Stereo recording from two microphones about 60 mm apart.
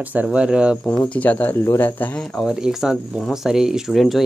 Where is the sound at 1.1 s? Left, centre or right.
Left.